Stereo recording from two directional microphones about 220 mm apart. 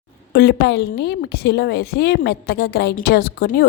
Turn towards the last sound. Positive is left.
turn(degrees=45)  # may be behind; listen again after turning